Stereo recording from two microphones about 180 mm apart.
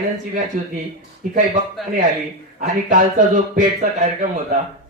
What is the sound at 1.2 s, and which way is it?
Speech, 50° right (ahead or behind).